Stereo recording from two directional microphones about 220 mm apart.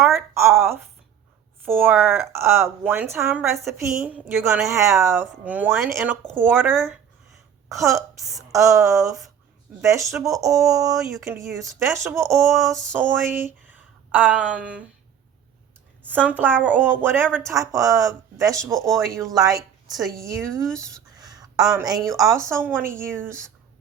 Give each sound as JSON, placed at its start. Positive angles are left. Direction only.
{"t": 0.1, "sound": "a woman's voice", "side_deg": -10}
{"t": 7.9, "sound": "speech", "side_deg": -15}
{"t": 13.7, "sound": "a sound", "side_deg": -5}
{"t": 16.3, "sound": "speech", "side_deg": -10}
{"t": 19.9, "sound": "a woman's voice", "side_deg": 0}
{"t": 21.2, "sound": "a sound", "side_deg": -15}
{"t": 22.1, "sound": "speech", "side_deg": -15}